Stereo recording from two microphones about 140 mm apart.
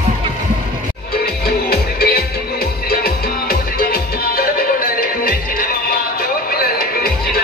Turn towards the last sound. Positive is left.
turn(degrees=90)